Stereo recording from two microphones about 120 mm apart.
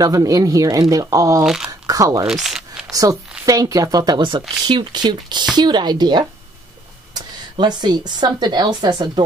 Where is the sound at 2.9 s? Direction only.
30° right (ahead or behind).